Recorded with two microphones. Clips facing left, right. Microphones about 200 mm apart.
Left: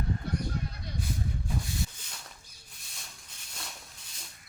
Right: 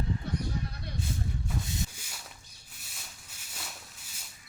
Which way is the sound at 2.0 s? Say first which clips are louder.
Right 1 dB; 5° right (ahead or behind).